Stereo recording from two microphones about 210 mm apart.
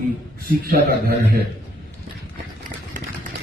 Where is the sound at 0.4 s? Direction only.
45° right (ahead or behind).